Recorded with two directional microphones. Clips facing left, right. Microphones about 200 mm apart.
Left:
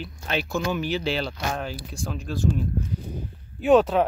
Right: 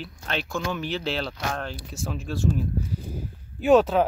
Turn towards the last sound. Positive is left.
turn(degrees=0)  # may be behind; listen again after turning